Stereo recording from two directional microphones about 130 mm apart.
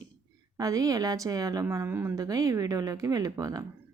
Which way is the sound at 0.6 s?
25° right (ahead or behind).